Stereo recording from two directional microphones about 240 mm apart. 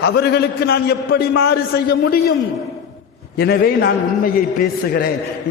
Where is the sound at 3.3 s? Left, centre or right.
Left.